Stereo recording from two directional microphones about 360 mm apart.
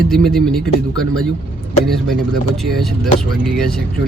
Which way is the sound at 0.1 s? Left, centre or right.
Centre.